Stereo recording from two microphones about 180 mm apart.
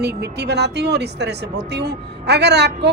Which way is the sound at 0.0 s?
65° right (ahead or behind).